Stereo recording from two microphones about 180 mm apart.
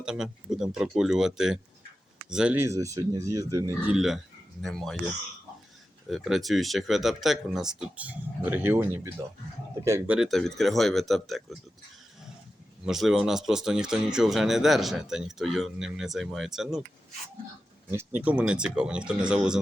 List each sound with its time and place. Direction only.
0.0 s speech: 5° right (ahead or behind)
3.9 s speech: centre (ahead or behind)
6.1 s speech: centre (ahead or behind)
10.2 s speech: centre (ahead or behind)
12.8 s speech: centre (ahead or behind)
17.9 s speech: 10° right (ahead or behind)